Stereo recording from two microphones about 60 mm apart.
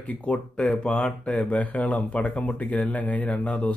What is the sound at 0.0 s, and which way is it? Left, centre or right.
Speech, left.